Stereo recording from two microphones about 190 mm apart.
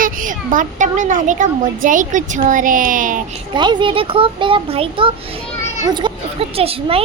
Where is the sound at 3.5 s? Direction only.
25° right (ahead or behind).